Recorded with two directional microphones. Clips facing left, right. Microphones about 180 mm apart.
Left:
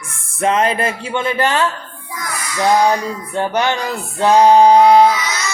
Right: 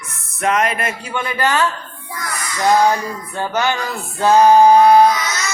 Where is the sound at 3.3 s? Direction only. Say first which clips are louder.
Left 2 dB; 20° left (ahead or behind).